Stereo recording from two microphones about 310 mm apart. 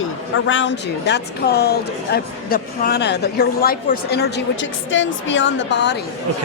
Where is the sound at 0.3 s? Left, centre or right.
Left.